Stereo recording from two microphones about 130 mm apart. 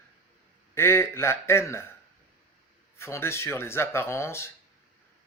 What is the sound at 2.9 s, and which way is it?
Speech, 20° left (ahead or behind).